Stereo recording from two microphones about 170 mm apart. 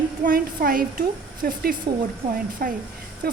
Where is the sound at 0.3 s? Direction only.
60° right (ahead or behind).